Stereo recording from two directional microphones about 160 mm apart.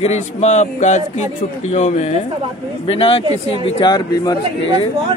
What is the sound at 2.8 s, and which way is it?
A man's voice, 35° left (ahead or behind).